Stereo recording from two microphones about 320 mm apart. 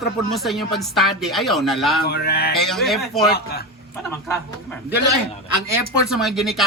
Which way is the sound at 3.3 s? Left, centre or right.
Left.